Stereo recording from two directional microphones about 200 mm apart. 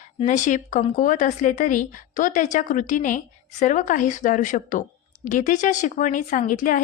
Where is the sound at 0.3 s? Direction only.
40° left (ahead or behind).